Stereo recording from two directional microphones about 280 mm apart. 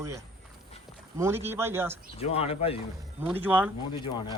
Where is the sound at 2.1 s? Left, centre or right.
Left.